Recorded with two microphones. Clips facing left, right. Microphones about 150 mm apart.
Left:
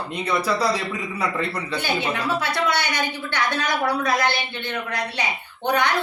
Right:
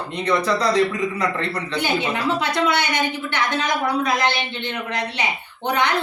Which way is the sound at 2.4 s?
20° right (ahead or behind).